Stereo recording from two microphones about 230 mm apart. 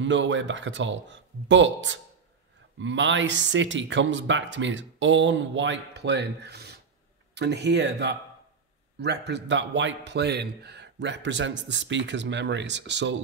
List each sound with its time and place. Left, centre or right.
0.0 s a man's voice: right